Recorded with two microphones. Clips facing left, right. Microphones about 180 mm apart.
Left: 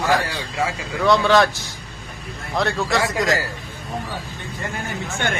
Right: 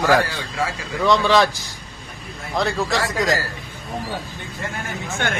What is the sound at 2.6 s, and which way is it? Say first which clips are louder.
Speech: left 1 dB; centre (ahead or behind).